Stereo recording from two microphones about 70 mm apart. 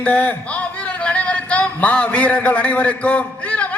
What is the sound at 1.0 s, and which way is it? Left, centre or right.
Music, centre.